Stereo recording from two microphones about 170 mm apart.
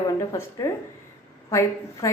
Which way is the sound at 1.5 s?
15° left (ahead or behind).